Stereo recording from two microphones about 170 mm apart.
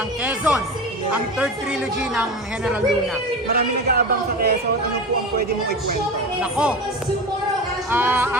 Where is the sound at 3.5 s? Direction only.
65° right (ahead or behind).